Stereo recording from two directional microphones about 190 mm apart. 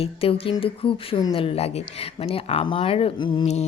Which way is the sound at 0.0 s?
30° left (ahead or behind).